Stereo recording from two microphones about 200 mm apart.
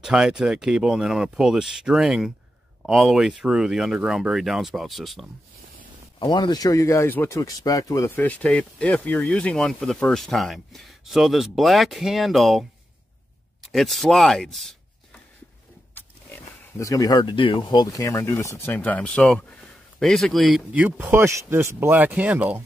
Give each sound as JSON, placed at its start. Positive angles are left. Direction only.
{"t": 0.0, "sound": "speech", "side_deg": -5}
{"t": 6.1, "sound": "speech", "side_deg": 20}
{"t": 15.9, "sound": "speech", "side_deg": 15}